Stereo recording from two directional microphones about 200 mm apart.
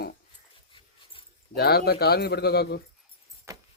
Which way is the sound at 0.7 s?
25° left (ahead or behind).